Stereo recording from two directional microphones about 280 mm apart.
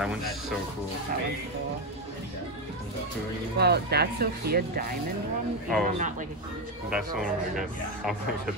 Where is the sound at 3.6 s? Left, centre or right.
Right.